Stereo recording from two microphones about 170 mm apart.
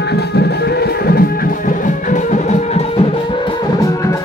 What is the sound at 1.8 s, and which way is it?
Music, 45° left (ahead or behind).